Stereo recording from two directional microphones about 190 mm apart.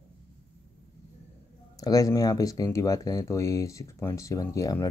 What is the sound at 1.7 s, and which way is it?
Speech, 20° left (ahead or behind).